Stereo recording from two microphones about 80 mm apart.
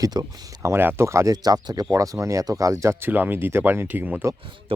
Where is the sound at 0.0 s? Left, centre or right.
Right.